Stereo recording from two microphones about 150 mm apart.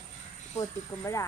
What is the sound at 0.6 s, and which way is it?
Child singing, 20° left (ahead or behind).